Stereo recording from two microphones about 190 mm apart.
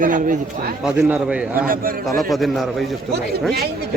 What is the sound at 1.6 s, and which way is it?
Speech, 50° right (ahead or behind).